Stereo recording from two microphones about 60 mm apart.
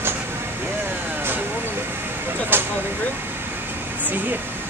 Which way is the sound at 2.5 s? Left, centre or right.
Right.